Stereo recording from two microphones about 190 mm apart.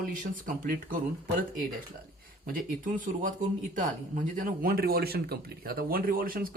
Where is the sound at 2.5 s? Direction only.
45° right (ahead or behind).